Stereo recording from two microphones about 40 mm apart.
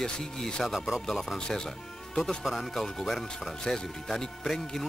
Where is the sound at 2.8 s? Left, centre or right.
Centre.